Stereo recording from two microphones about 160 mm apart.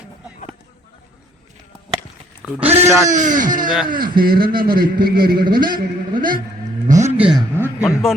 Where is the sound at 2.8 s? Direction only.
50° right (ahead or behind).